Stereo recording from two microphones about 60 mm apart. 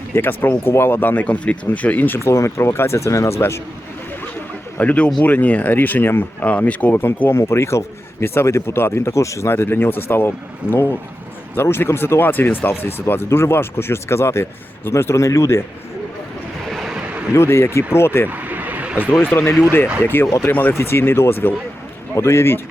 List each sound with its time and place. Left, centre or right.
0.1 s speech: left
2.1 s speech: left
4.8 s speech: left
9.5 s speech: left
16.6 s vehicle: centre
17.3 s speech: left
18.3 s vehicle: right
19.2 s speech: left
20.7 s speech: left